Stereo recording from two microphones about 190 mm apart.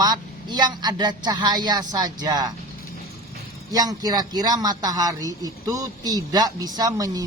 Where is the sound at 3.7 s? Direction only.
20° right (ahead or behind).